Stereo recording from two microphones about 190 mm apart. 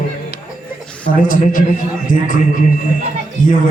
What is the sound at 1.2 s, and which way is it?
A man's voice, 45° left (ahead or behind).